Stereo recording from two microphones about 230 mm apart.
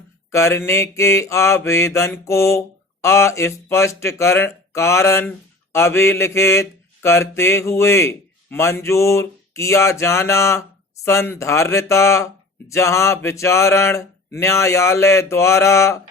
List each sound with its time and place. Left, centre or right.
0.3 s mantra: centre